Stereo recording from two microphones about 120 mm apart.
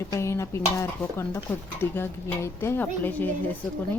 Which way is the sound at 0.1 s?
25° left (ahead or behind).